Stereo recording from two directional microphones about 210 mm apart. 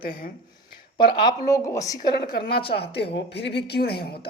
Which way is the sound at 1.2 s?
20° left (ahead or behind).